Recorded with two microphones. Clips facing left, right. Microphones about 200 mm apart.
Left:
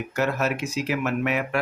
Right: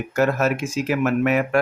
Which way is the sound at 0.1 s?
50° right (ahead or behind).